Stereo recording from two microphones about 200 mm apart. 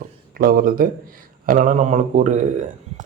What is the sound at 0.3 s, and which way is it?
Speech, 45° right (ahead or behind).